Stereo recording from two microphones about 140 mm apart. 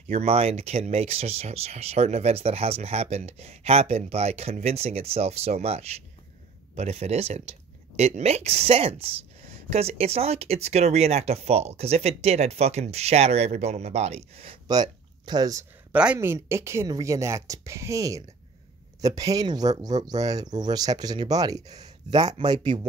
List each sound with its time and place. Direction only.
0.3 s speech: 50° right (ahead or behind)
14.7 s speech: 30° right (ahead or behind)
15.9 s speech: 5° right (ahead or behind)
16.2 s speech: 20° right (ahead or behind)